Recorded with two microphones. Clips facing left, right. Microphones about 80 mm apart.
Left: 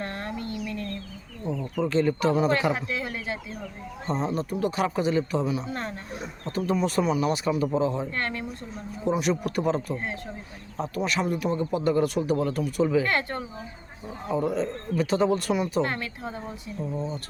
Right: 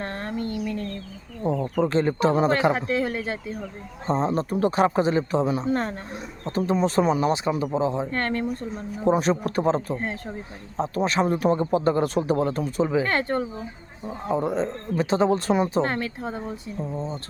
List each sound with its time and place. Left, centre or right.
0.0 s a sound: right
1.5 s a sound: right
1.7 s speech: right
6.4 s speech: right
7.6 s speech: right
8.1 s speech: right
14.3 s speech: centre